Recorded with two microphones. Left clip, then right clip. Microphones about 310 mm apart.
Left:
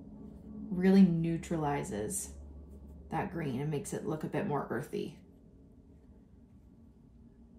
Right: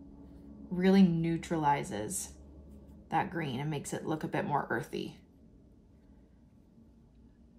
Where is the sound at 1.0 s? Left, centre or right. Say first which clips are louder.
Even; centre.